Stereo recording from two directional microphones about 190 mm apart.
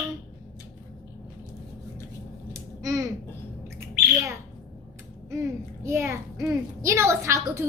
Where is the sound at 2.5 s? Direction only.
15° right (ahead or behind).